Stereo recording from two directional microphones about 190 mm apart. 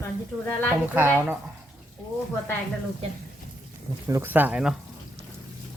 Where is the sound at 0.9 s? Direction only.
10° right (ahead or behind).